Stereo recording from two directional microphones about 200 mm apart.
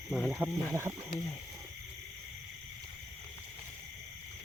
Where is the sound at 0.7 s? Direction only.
15° right (ahead or behind).